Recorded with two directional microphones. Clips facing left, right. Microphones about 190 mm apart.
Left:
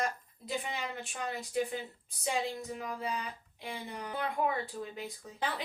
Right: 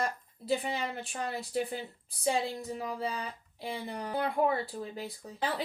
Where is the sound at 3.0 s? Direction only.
35° right (ahead or behind).